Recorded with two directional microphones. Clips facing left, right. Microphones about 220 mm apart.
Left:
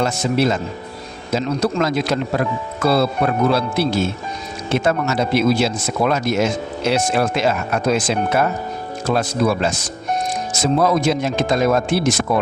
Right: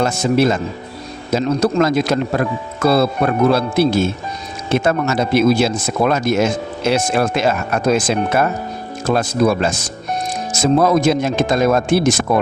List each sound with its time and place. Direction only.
0.0 s speech: 50° right (ahead or behind)